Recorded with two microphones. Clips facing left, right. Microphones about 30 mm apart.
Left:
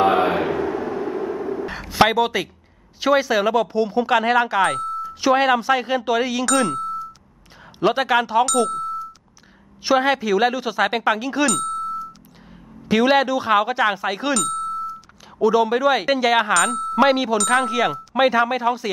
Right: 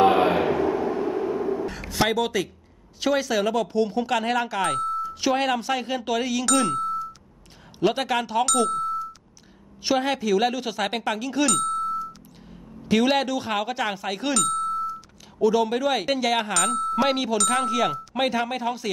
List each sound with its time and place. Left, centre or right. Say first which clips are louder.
0.0 s a sound: left 1 dB; centre
1.7 s a sound: left 3 dB; left
2.0 s speech: left 4 dB; left
6.4 s ding: left 2 dB; centre
7.8 s speech: left 5 dB; centre
8.5 s speech: left 2 dB; centre
9.8 s speech: left 5 dB; centre
11.5 s music: even; centre
12.8 s speech: left 4 dB; centre
14.3 s music: left 1 dB; centre
15.4 s speech: left 4 dB; centre
16.5 s speech: left 5 dB; centre